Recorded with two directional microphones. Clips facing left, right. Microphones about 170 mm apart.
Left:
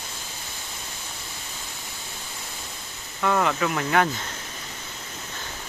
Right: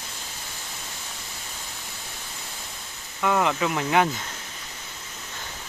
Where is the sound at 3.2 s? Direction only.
10° right (ahead or behind).